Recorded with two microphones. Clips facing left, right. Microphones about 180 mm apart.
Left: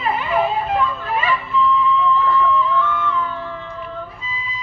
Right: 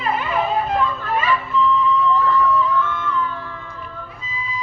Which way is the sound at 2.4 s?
40° right (ahead or behind).